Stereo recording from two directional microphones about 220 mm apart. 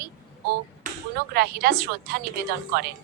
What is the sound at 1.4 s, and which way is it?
A woman's voice, 45° right (ahead or behind).